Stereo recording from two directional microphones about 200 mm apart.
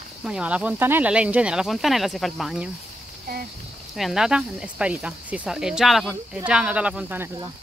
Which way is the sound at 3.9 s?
Centre (ahead or behind).